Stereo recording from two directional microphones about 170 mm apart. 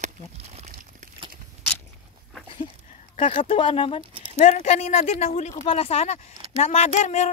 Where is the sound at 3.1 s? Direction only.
30° left (ahead or behind).